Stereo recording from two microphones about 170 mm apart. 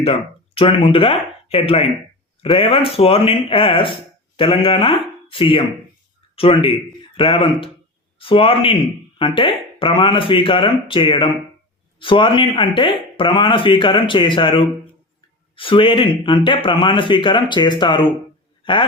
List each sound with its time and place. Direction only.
0.0 s a man's voice: 35° left (ahead or behind)